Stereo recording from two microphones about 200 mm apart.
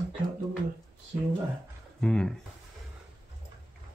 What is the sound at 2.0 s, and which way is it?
Speech, 5° left (ahead or behind).